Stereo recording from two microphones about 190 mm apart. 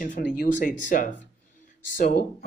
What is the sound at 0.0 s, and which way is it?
Speech, 45° left (ahead or behind).